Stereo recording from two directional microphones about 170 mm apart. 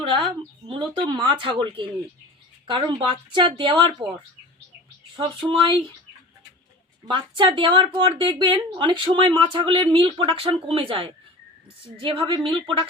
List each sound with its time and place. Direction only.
0.2 s speech: 30° right (ahead or behind)
5.5 s speech: 30° right (ahead or behind)
7.0 s speech: 30° right (ahead or behind)